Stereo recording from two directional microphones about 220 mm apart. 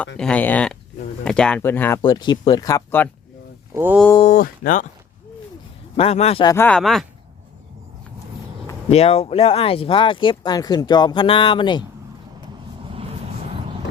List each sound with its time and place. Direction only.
0.2 s speech: 5° left (ahead or behind)
2.0 s speech: 20° left (ahead or behind)
3.8 s speech: 10° right (ahead or behind)
4.2 s speech: 35° left (ahead or behind)
6.0 s speech: 30° left (ahead or behind)
6.5 s speech: 10° left (ahead or behind)
8.9 s speech: 30° left (ahead or behind)